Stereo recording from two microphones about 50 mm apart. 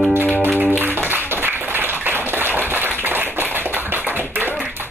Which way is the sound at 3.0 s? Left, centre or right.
Right.